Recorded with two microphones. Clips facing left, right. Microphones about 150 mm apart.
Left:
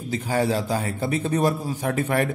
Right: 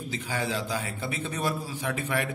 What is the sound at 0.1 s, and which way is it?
A man's voice, 45° left (ahead or behind).